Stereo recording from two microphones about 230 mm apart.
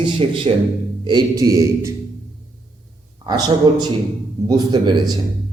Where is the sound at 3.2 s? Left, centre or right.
Centre.